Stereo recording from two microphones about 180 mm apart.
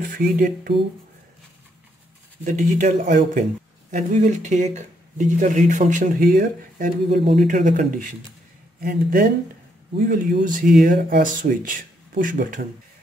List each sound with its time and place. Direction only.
0.0 s speech: 50° right (ahead or behind)
2.4 s speech: 45° right (ahead or behind)